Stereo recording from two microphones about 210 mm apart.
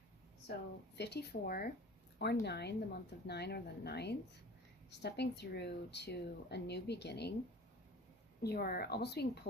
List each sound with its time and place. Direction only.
0.9 s speech: 50° left (ahead or behind)
8.4 s speech: 50° left (ahead or behind)